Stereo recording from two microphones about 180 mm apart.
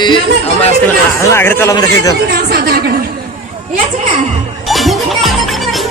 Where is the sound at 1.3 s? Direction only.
15° left (ahead or behind).